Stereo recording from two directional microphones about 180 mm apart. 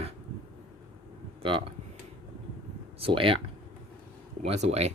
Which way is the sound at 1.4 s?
30° right (ahead or behind).